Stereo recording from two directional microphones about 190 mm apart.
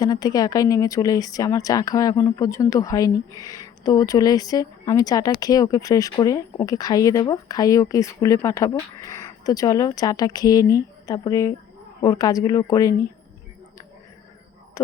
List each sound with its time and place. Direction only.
0.0 s a woman's voice: 20° left (ahead or behind)